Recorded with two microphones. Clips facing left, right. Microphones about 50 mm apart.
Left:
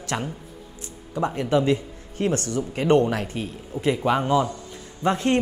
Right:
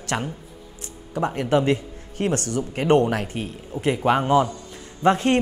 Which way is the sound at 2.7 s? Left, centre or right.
Right.